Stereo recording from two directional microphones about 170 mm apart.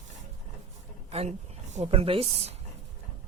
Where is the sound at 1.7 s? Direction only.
35° right (ahead or behind).